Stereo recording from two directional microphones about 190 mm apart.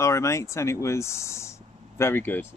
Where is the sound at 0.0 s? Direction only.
15° left (ahead or behind).